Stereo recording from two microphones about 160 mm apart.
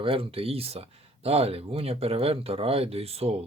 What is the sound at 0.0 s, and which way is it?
Speech, 35° right (ahead or behind).